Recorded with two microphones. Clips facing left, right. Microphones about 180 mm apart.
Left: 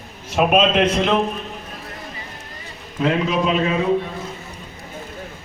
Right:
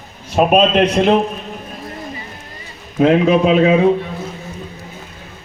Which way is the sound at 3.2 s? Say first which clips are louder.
Right 8 dB; 60° right (ahead or behind).